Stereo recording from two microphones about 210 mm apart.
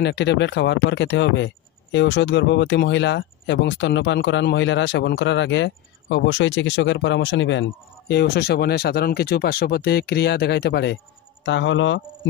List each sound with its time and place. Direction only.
0.0 s speech: 55° left (ahead or behind)